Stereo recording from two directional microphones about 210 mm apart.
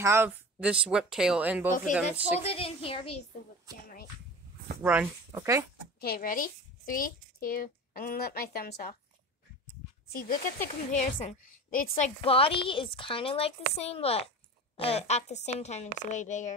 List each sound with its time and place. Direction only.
0.0 s speech: 10° right (ahead or behind)
2.4 s speech: 25° left (ahead or behind)
4.8 s speech: 10° right (ahead or behind)
5.9 s a woman's voice: 45° left (ahead or behind)
10.0 s a woman's voice: 45° left (ahead or behind)
12.3 s a woman's voice: 25° left (ahead or behind)